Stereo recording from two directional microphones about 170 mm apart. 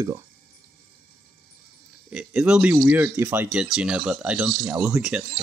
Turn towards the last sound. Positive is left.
turn(degrees=-5)  # may be behind; listen again after turning